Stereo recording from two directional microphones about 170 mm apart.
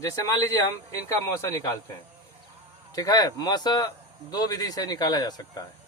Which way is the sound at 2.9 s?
20° left (ahead or behind).